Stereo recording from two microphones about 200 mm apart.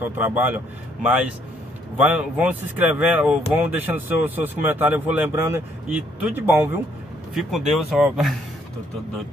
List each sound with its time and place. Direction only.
0.0 s speech: 10° right (ahead or behind)